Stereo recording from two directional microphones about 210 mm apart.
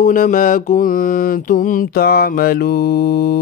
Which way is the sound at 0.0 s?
40° left (ahead or behind).